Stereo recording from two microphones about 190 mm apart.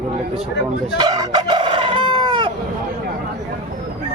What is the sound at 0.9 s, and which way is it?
Crowing, 20° right (ahead or behind).